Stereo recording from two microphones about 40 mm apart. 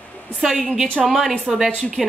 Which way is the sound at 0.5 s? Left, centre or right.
Centre.